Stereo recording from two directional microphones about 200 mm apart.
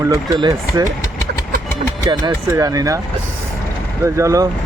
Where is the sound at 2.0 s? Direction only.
20° right (ahead or behind).